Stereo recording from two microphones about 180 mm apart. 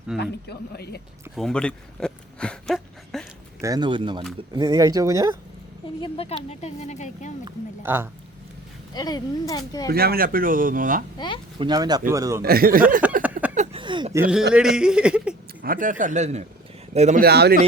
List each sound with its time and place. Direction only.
0.2 s a man's voice: 65° left (ahead or behind)
1.4 s speech: 5° left (ahead or behind)
3.6 s speech: 20° right (ahead or behind)
6.0 s speech: 35° left (ahead or behind)
7.8 s speech: 10° right (ahead or behind)
8.9 s speech: 20° left (ahead or behind)
9.9 s speech: 60° right (ahead or behind)
11.6 s speech: 20° right (ahead or behind)
12.4 s speech: 55° right (ahead or behind)
13.0 s a sound: 10° right (ahead or behind)
13.7 s speech: 25° right (ahead or behind)
14.2 s speech: 5° right (ahead or behind)
15.6 s speech: 50° right (ahead or behind)
17.2 s speech: 60° right (ahead or behind)